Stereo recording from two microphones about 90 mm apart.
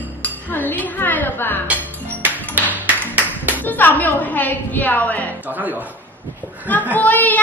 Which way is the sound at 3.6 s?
20° left (ahead or behind).